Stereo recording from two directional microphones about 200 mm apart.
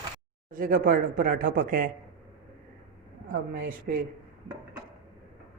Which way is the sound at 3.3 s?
40° right (ahead or behind).